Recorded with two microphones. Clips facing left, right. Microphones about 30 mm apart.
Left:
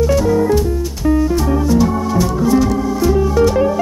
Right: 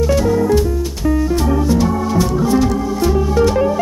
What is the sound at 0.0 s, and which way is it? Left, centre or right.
Music, centre.